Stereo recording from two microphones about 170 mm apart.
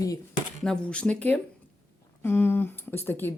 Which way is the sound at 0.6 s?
5° left (ahead or behind).